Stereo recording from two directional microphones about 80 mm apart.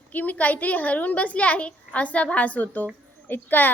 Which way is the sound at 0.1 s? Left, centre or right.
Centre.